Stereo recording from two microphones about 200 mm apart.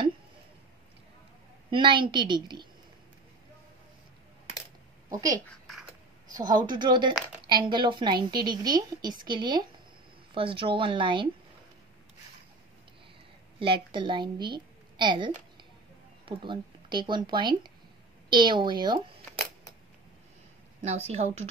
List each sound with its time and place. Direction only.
1.7 s a woman's voice: 25° right (ahead or behind)
5.1 s a woman's voice: 20° right (ahead or behind)
5.5 s a sound: centre (ahead or behind)
6.3 s a woman's voice: 20° right (ahead or behind)
13.6 s a woman's voice: 25° right (ahead or behind)
21.1 s speech: 35° right (ahead or behind)